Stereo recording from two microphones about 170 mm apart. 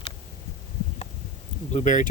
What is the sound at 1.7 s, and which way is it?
Speech, 45° left (ahead or behind).